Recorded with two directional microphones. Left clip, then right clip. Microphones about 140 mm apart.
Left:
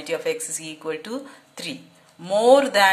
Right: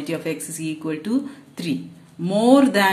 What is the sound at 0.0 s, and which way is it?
A woman's voice, 20° left (ahead or behind).